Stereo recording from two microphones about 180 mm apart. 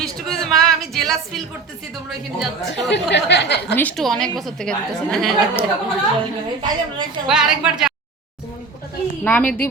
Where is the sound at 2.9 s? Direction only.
75° left (ahead or behind).